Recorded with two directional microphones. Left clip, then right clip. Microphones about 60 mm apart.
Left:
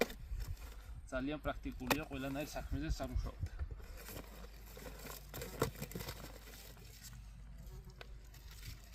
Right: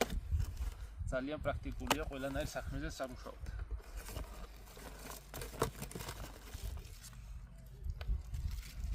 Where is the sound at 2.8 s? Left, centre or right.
Right.